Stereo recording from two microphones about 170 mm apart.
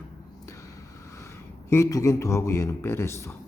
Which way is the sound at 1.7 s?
20° left (ahead or behind).